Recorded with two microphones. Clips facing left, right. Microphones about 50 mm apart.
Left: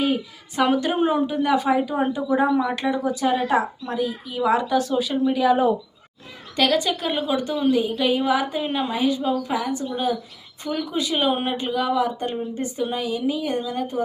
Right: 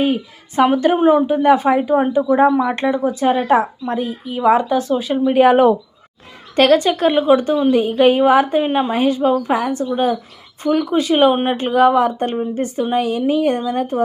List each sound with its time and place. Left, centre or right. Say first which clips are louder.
0.0 s a woman's voice: right 5 dB; right
5.3 s speech: right 9 dB; right
6.6 s a woman's voice: right 8 dB; right
11.5 s a woman's voice: right 9 dB; right